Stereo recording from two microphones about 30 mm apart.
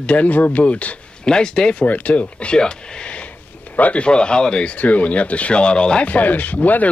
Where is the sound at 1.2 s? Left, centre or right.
Left.